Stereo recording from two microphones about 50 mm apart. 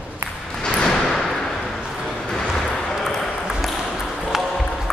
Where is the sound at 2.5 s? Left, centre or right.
Centre.